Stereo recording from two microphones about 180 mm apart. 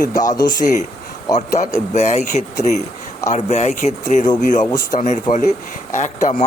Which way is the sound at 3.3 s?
40° left (ahead or behind).